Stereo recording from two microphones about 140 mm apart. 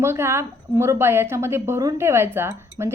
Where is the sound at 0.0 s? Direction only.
15° right (ahead or behind).